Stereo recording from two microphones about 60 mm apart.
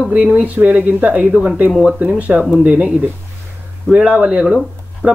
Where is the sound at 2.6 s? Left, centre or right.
Right.